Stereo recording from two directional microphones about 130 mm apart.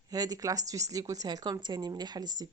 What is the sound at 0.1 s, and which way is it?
Speech, 30° right (ahead or behind).